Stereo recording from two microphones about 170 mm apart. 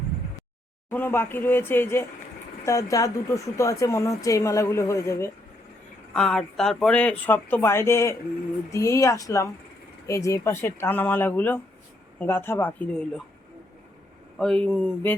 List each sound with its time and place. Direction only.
0.9 s speech: 10° left (ahead or behind)
6.1 s speech: 5° left (ahead or behind)
14.3 s speech: 5° left (ahead or behind)